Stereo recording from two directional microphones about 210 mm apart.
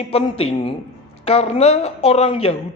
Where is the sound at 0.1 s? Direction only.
25° left (ahead or behind).